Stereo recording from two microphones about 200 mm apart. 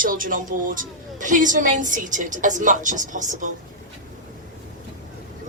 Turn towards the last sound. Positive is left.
turn(degrees=-40)  # may be behind; listen again after turning